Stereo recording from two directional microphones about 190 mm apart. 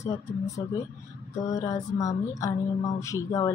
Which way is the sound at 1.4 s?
15° left (ahead or behind).